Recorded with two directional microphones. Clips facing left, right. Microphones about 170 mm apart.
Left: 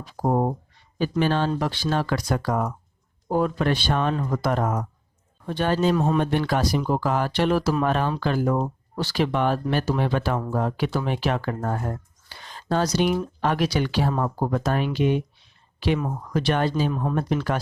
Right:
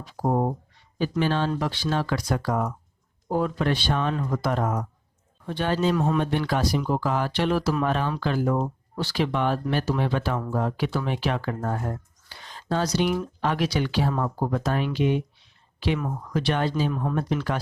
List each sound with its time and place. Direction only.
0.2 s speech: 40° left (ahead or behind)
1.2 s speech: 50° left (ahead or behind)
5.9 s speech: 30° left (ahead or behind)
6.5 s speech: 45° left (ahead or behind)
16.3 s speech: 45° left (ahead or behind)
16.9 s speech: 25° left (ahead or behind)
17.2 s speech: 50° left (ahead or behind)